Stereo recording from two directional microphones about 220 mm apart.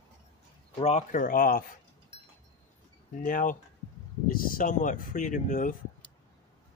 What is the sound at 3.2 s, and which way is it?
Speech, 35° left (ahead or behind).